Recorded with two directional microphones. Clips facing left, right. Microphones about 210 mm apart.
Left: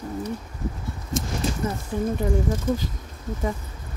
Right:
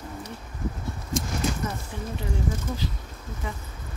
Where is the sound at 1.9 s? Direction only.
45° left (ahead or behind).